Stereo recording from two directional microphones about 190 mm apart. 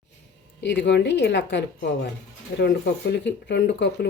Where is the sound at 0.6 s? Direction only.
65° left (ahead or behind).